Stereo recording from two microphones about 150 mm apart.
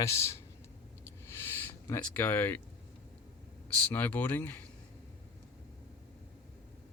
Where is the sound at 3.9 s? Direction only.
10° left (ahead or behind).